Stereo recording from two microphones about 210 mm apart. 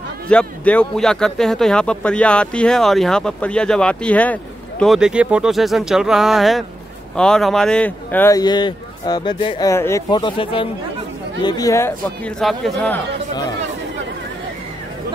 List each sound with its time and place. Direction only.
0.3 s speech: 5° left (ahead or behind)